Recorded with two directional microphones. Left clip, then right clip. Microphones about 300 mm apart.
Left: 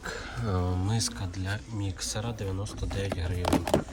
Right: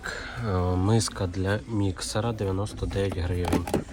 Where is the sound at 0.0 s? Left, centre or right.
Centre.